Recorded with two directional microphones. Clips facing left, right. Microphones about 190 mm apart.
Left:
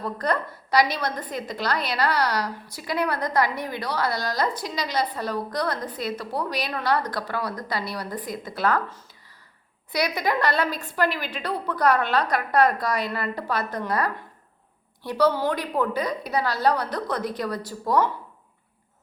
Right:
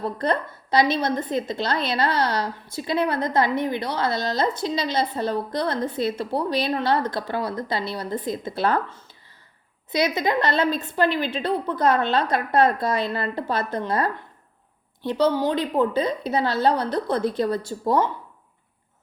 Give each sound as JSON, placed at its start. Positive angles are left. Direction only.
{"t": 0.0, "sound": "a woman's voice", "side_deg": -25}